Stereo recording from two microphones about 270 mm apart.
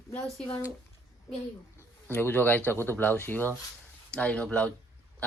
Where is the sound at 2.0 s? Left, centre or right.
Centre.